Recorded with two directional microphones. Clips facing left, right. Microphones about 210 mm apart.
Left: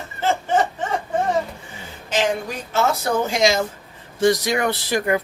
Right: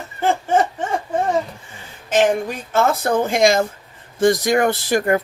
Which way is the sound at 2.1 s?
50° right (ahead or behind).